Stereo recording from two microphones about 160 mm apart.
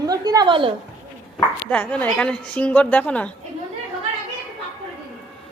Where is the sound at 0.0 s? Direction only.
25° right (ahead or behind).